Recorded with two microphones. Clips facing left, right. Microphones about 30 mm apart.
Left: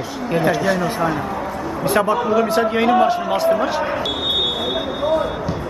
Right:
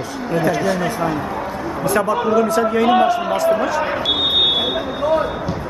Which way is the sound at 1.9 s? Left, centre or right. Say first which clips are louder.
Even; left.